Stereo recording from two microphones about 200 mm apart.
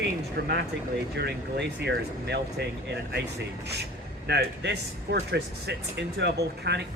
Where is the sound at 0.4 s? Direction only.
50° right (ahead or behind).